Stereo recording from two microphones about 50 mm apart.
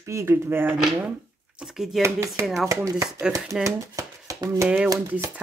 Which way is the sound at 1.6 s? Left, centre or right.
Centre.